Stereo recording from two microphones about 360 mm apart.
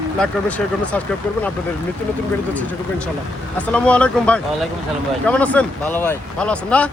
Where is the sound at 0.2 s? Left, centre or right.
Centre.